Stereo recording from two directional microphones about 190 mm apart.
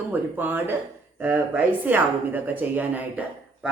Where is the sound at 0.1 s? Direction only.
10° right (ahead or behind).